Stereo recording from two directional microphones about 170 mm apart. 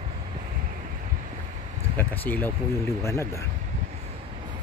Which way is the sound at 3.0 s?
15° left (ahead or behind).